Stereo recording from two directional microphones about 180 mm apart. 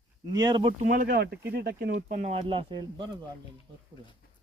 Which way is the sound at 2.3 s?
30° right (ahead or behind).